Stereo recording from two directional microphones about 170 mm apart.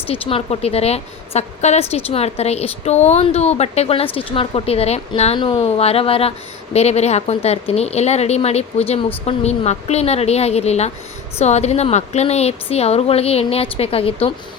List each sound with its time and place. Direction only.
0.1 s a woman's voice: 35° left (ahead or behind)